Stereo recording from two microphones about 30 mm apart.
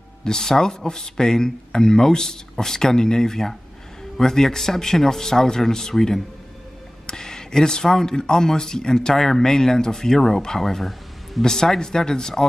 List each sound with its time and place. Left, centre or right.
0.2 s a man's voice: left
10.6 s speech: centre
11.4 s speech: centre